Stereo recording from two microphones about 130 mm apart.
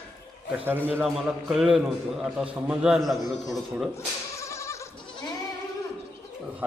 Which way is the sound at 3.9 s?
25° left (ahead or behind).